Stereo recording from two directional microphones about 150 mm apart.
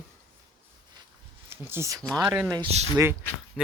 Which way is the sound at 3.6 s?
Centre (ahead or behind).